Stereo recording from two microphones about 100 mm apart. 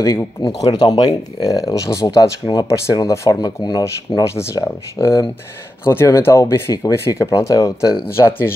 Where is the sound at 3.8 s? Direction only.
30° left (ahead or behind).